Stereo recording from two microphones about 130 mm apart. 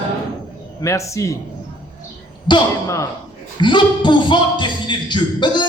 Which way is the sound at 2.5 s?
35° left (ahead or behind).